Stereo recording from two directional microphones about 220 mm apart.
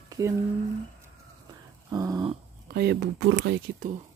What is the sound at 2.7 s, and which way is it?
Speech, 45° right (ahead or behind).